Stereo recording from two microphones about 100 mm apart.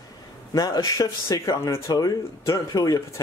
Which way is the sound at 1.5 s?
30° left (ahead or behind).